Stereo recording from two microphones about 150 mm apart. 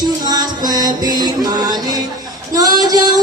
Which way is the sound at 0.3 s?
25° right (ahead or behind).